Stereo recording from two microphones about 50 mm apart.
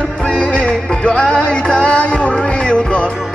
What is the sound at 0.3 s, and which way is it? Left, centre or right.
Music, left.